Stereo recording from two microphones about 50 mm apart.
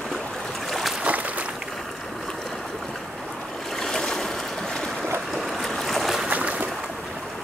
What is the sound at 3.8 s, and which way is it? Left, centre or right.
Boat, centre.